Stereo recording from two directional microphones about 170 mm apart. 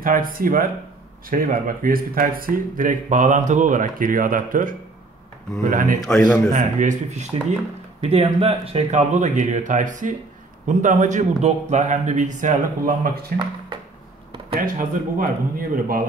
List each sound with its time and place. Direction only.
0.0 s speech: 55° right (ahead or behind)
6.0 s a man's voice: 5° left (ahead or behind)
6.5 s speech: 45° right (ahead or behind)
14.6 s speech: 55° right (ahead or behind)